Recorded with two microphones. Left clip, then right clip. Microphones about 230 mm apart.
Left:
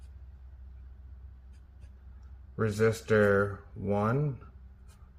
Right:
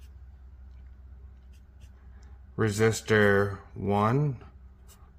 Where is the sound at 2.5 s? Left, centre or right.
Right.